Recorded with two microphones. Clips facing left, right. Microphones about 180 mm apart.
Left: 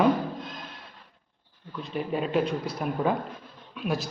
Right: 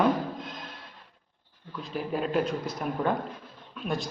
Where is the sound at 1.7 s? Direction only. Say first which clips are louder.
Left 2 dB; centre (ahead or behind).